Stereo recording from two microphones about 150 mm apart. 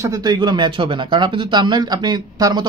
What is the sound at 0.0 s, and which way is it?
Speech, 25° right (ahead or behind).